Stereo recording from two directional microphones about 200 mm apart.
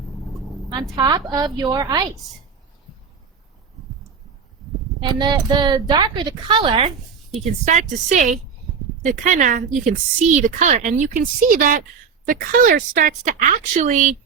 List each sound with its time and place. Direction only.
0.9 s a woman's voice: 20° right (ahead or behind)
4.9 s a woman's voice: 20° right (ahead or behind); by 14.2 s 40° right (ahead or behind)